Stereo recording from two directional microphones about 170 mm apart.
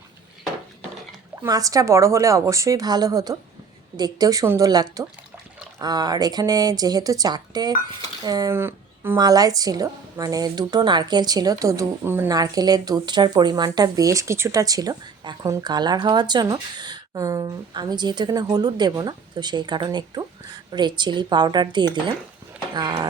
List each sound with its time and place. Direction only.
1.5 s a woman's voice: 20° right (ahead or behind)